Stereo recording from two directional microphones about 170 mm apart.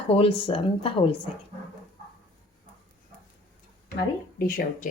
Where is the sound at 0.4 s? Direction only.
30° left (ahead or behind).